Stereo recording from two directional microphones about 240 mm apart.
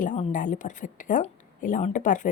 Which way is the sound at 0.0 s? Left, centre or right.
Left.